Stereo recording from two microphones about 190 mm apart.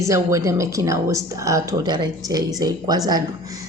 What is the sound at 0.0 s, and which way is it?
A woman's voice, 15° right (ahead or behind).